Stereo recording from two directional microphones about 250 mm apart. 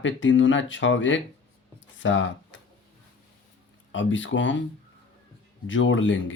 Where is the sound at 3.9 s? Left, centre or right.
Left.